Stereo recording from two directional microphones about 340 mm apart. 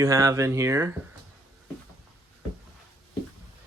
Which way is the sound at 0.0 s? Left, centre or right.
Centre.